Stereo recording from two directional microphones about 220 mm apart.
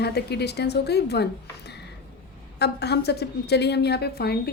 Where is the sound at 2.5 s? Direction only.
50° left (ahead or behind).